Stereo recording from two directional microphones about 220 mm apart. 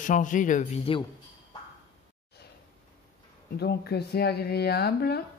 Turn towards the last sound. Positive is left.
turn(degrees=45)  # may be behind; listen again after turning